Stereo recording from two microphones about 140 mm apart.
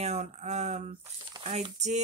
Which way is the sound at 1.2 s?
35° right (ahead or behind).